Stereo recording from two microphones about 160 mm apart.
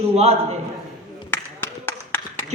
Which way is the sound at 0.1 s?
40° right (ahead or behind).